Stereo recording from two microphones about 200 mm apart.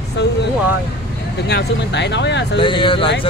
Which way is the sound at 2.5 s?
25° left (ahead or behind).